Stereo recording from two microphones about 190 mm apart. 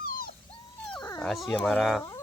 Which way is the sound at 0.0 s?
50° left (ahead or behind).